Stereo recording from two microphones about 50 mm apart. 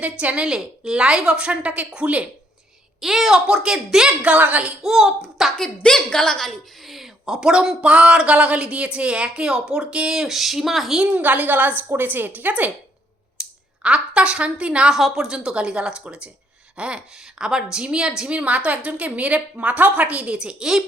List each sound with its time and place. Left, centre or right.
0.0 s speech: right
0.4 s speech: centre
3.0 s a woman's voice: centre
4.3 s speech: right
4.8 s a woman's voice: centre
5.5 s a woman's voice: centre
6.8 s speech: centre
7.8 s speech: right; by 10.9 s centre
10.9 s speech: right
11.2 s a woman's voice: right
13.4 s speech: centre
14.9 s a woman's voice: centre